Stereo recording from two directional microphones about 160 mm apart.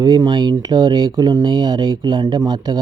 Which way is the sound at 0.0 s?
30° right (ahead or behind).